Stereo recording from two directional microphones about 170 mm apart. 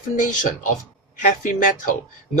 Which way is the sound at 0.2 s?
50° left (ahead or behind).